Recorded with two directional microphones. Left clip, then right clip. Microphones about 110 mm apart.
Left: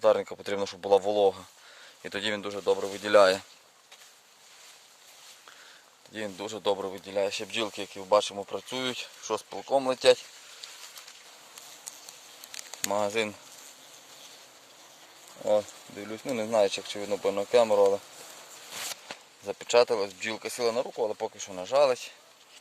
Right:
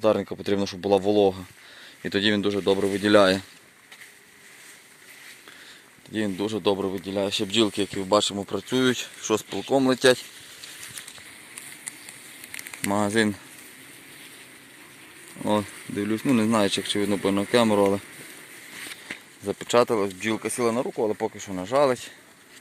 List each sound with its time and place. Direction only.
0.0 s speech: 30° left (ahead or behind)
2.0 s speech: 10° left (ahead or behind)
6.1 s speech: 15° left (ahead or behind)
7.4 s speech: 5° right (ahead or behind); by 9.0 s 10° left (ahead or behind)
9.0 s speech: 5° right (ahead or behind)
9.7 s speech: 5° left (ahead or behind)
12.9 s speech: 15° left (ahead or behind)
15.4 s speech: 20° right (ahead or behind)
19.5 s speech: 20° left (ahead or behind)
21.0 s speech: 20° left (ahead or behind)